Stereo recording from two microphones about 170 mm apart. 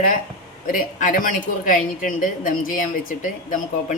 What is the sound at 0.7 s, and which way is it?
A woman's voice, 50° left (ahead or behind).